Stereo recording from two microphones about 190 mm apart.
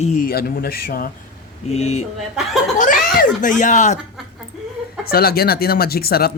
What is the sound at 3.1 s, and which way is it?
Speech, 45° left (ahead or behind).